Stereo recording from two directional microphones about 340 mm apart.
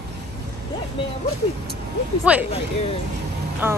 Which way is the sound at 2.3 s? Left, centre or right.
Centre.